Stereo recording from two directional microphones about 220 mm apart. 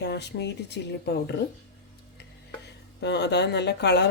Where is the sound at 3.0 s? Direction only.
50° left (ahead or behind).